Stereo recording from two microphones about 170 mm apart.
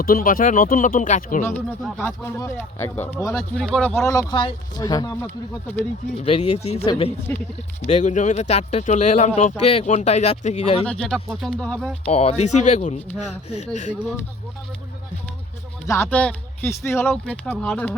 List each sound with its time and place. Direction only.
0.0 s speech: 55° left (ahead or behind)
2.0 s speech: 15° left (ahead or behind)
3.3 s speech: 5° left (ahead or behind)
6.2 s speech: 35° left (ahead or behind)
7.3 s speech: 15° left (ahead or behind)
7.9 s speech: 45° left (ahead or behind)
10.8 s speech: 5° left (ahead or behind)
12.0 s speech: 35° left (ahead or behind)
15.9 s speech: 15° left (ahead or behind)